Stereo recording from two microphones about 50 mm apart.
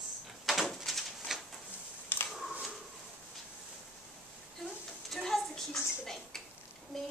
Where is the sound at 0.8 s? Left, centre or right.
Centre.